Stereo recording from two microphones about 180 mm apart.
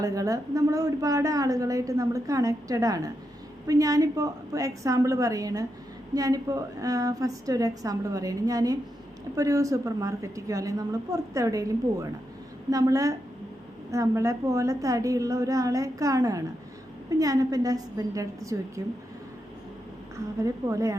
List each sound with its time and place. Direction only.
0.0 s a woman's voice: 20° right (ahead or behind)
20.4 s a woman's voice: 15° right (ahead or behind)